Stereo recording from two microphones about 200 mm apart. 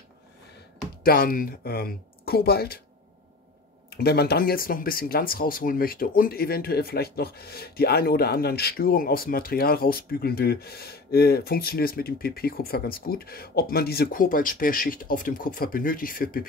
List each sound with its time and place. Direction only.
1.0 s speech: 45° left (ahead or behind)
3.9 s speech: 50° left (ahead or behind)